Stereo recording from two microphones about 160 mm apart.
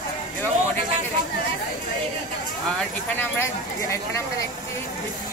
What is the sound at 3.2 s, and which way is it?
Speech, 15° left (ahead or behind).